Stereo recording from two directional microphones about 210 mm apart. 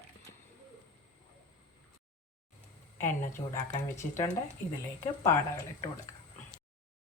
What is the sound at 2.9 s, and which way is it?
Speech, 10° left (ahead or behind).